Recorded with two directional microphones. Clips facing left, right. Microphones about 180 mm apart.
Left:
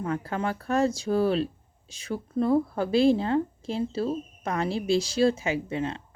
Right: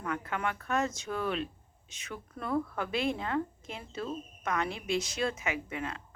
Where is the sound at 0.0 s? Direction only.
35° left (ahead or behind).